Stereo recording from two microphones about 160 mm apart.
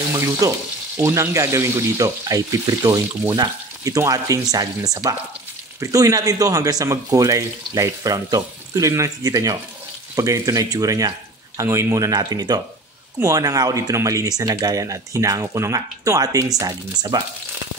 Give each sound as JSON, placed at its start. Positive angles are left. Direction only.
{"t": 0.4, "sound": "speech", "side_deg": -20}